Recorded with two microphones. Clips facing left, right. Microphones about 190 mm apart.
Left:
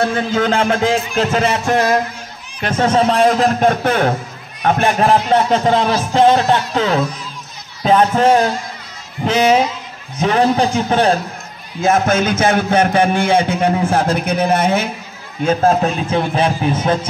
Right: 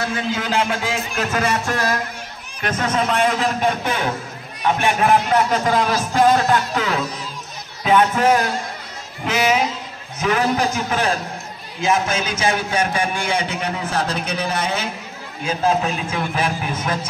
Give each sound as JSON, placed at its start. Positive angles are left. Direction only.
{"t": 0.1, "sound": "music", "side_deg": 50}
{"t": 4.6, "sound": "speech", "side_deg": 40}
{"t": 7.8, "sound": "music", "side_deg": 35}
{"t": 11.8, "sound": "a man's voice", "side_deg": 50}
{"t": 15.4, "sound": "music", "side_deg": 45}